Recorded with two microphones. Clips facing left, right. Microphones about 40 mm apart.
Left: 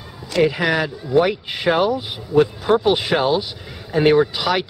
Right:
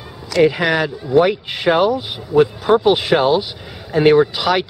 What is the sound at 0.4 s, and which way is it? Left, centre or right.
Speech, centre.